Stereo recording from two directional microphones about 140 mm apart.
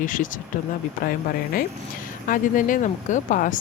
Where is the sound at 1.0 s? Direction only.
90° left.